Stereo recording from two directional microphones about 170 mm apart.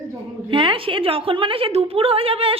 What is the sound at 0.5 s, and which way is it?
A woman's voice, 30° right (ahead or behind).